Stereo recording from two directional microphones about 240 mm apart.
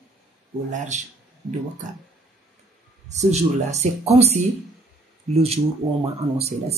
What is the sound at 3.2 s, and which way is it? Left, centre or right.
A woman's voice, right.